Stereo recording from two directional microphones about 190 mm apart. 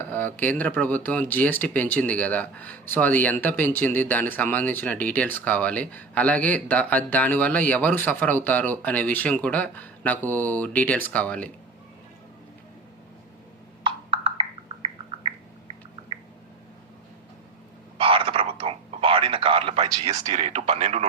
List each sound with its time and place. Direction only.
0.1 s speech: 10° left (ahead or behind)
13.8 s bird: 30° right (ahead or behind)
17.9 s a sound: 30° right (ahead or behind)